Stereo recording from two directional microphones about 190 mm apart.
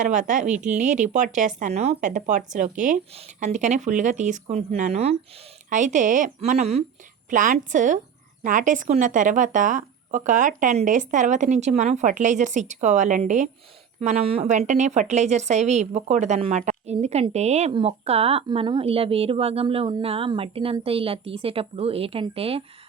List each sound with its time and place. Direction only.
0.0 s a woman's voice: 40° right (ahead or behind)